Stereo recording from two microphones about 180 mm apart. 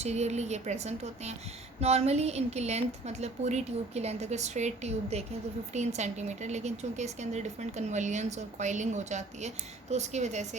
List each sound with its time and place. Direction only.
0.0 s speech: 40° right (ahead or behind)